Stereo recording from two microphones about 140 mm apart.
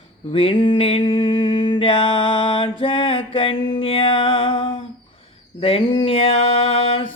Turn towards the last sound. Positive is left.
turn(degrees=45)  # may be behind; listen again after turning